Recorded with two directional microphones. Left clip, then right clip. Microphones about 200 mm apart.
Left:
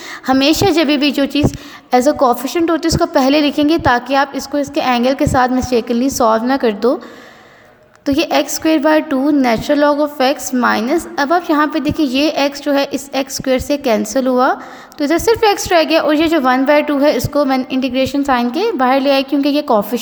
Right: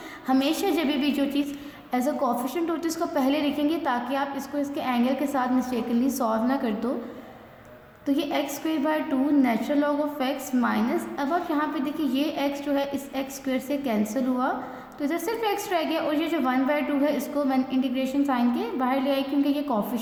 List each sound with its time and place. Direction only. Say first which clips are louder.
0.3 s a woman's voice: left 12 dB; 40° left (ahead or behind)
8.0 s a woman's voice: left 12 dB; 45° left (ahead or behind)